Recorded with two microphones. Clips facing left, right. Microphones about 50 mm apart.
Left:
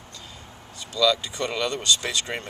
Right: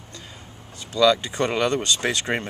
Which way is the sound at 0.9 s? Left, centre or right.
Right.